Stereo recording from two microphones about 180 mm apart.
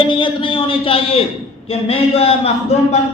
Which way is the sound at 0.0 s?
25° left (ahead or behind).